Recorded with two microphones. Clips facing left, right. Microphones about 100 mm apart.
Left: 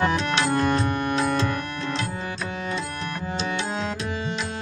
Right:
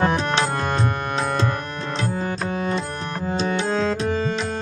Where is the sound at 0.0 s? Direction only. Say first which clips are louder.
Right 2 dB; 35° right (ahead or behind).